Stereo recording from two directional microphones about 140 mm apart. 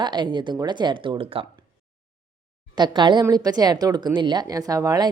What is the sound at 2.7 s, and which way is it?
A woman's voice, 30° right (ahead or behind).